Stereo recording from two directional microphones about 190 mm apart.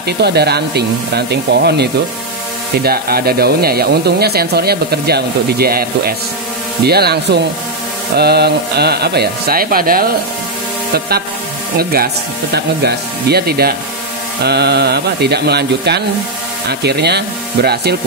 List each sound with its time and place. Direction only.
0.0 s speech: 60° right (ahead or behind)